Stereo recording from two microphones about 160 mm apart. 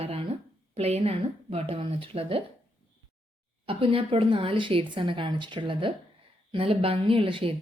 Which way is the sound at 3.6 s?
35° right (ahead or behind).